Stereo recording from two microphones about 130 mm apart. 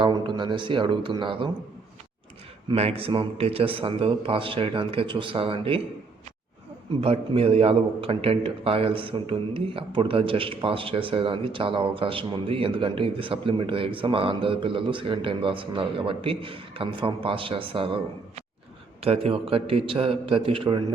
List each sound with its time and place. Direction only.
0.0 s speech: 40° right (ahead or behind)
2.7 s a man's voice: 50° right (ahead or behind)
7.0 s a man's voice: 50° right (ahead or behind)